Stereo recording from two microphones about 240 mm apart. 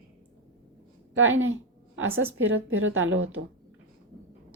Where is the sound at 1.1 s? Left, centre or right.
Right.